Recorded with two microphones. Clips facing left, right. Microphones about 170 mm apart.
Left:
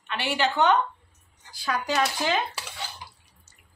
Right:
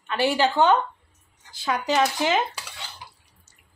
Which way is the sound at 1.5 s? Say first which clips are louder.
Right 3 dB; 20° right (ahead or behind).